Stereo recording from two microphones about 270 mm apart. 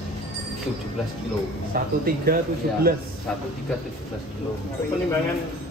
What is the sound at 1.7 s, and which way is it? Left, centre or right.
Speech, right.